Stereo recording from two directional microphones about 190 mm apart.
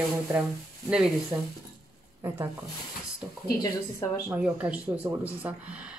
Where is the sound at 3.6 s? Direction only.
20° left (ahead or behind).